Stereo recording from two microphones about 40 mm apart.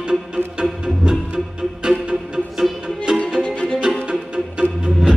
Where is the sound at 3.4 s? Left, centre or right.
Left.